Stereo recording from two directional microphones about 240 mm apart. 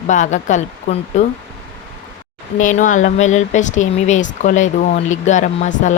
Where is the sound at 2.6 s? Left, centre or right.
Left.